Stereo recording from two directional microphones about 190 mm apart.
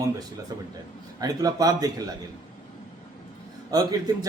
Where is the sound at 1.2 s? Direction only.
20° right (ahead or behind).